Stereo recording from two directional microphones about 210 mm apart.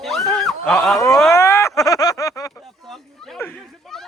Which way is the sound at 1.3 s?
15° left (ahead or behind).